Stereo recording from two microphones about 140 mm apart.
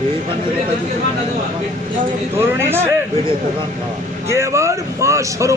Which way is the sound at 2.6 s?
15° right (ahead or behind).